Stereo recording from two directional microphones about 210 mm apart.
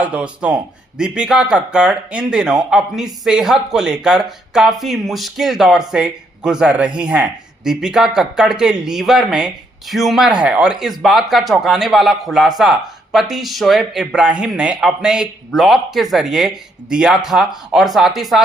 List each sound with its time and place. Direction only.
0.0 s speech: 5° right (ahead or behind)